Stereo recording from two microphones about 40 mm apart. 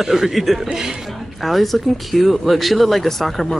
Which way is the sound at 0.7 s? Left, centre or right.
Centre.